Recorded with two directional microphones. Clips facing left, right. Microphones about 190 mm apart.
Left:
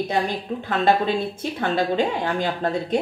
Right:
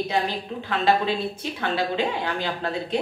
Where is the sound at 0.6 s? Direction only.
50° left (ahead or behind).